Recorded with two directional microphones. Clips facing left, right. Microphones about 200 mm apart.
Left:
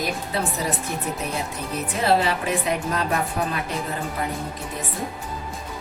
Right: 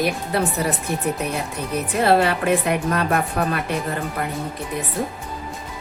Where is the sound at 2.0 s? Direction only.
60° right (ahead or behind).